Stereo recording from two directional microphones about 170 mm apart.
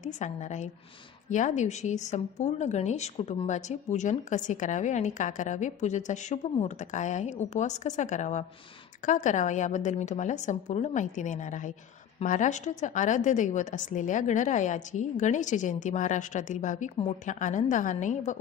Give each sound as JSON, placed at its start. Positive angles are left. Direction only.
{"t": 0.0, "sound": "speech", "side_deg": 45}